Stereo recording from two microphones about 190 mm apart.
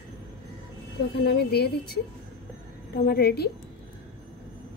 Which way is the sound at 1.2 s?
60° left (ahead or behind).